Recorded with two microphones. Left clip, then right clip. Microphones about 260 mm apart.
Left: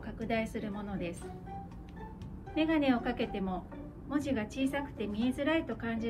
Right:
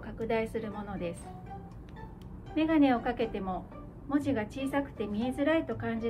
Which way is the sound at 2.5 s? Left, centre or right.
Right.